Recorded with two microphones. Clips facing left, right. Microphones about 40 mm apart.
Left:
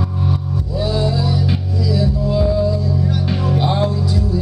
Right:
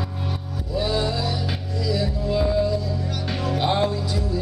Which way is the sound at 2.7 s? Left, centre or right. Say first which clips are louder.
Left 6 dB; centre.